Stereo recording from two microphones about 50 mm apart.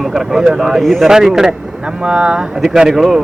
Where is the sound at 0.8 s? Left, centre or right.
Centre.